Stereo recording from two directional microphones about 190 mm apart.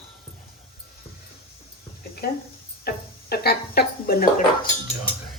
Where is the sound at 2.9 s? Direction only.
55° left (ahead or behind).